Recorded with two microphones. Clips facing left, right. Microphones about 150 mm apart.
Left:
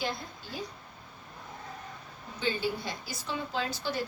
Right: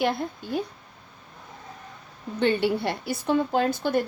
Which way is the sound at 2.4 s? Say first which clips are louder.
Right 9 dB; 65° right (ahead or behind).